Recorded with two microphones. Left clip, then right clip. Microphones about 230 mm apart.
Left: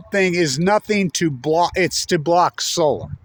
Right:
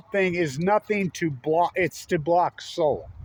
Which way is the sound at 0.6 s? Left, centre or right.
Left.